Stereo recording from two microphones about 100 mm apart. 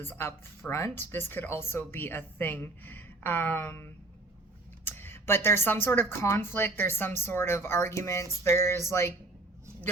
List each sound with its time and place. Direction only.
0.0 s a woman's voice: 25° left (ahead or behind)
4.9 s a woman's voice: 25° left (ahead or behind)